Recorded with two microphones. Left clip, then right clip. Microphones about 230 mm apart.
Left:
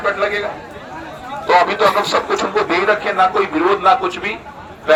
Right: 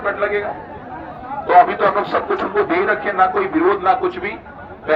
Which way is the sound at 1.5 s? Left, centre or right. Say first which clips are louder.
Even; left.